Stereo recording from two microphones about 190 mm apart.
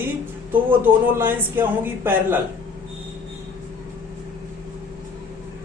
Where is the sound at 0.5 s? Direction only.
10° right (ahead or behind).